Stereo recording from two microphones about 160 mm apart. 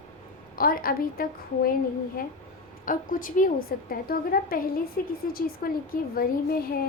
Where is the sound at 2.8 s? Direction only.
60° left (ahead or behind).